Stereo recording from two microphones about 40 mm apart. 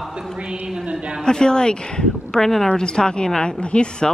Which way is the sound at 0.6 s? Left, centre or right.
Right.